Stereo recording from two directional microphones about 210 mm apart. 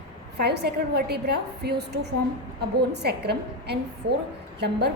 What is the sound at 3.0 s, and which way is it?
A woman's voice, 50° right (ahead or behind).